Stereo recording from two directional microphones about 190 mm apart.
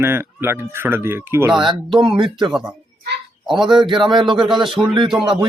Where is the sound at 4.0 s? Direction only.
Centre (ahead or behind).